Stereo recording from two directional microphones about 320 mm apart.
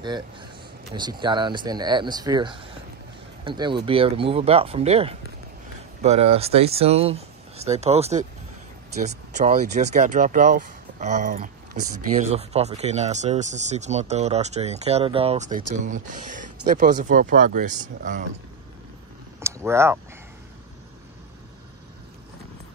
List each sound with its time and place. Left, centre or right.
0.0 s speech: centre
19.4 s speech: centre